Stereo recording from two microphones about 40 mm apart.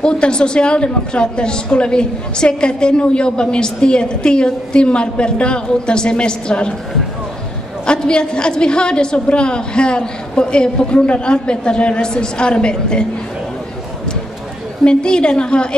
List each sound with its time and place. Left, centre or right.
0.0 s a woman's voice: left
7.8 s a woman's voice: left
14.9 s a woman's voice: left